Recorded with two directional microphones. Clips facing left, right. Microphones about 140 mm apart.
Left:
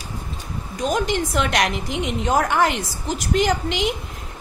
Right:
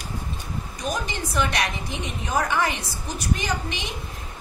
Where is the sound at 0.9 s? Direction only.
90° left.